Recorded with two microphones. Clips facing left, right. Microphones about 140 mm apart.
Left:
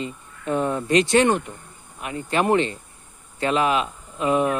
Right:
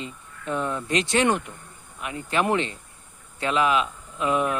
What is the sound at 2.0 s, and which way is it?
Speech, 40° left (ahead or behind).